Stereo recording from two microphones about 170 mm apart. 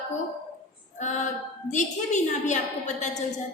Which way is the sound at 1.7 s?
45° left (ahead or behind).